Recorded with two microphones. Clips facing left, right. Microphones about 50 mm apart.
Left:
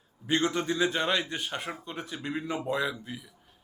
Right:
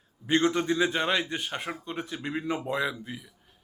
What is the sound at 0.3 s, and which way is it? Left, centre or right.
A man's voice, centre.